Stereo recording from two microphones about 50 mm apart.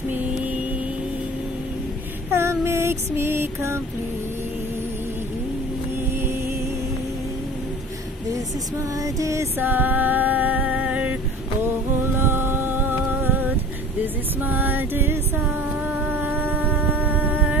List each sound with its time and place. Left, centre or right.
2.3 s female singing: right
9.2 s music: right
9.6 s music: right
10.7 s a sound: right
12.2 s music: right
15.9 s a sound: right